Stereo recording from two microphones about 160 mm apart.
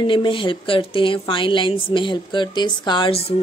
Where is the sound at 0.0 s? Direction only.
30° left (ahead or behind).